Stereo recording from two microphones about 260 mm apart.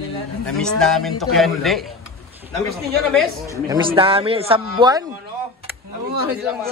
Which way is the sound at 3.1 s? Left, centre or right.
Centre.